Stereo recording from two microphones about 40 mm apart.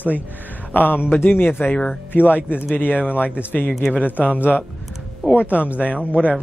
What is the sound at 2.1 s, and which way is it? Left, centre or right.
Speech, left.